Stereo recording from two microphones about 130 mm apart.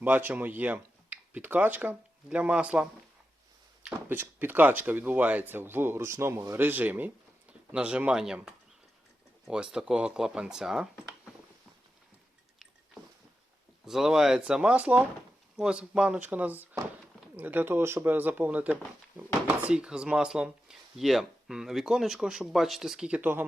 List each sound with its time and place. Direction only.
0.0 s speech: 15° right (ahead or behind)
4.1 s speech: 15° right (ahead or behind)
9.7 s speech: 5° right (ahead or behind)
13.8 s speech: 5° right (ahead or behind)